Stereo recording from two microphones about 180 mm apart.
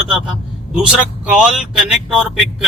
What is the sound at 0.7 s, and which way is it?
Speech, 5° right (ahead or behind).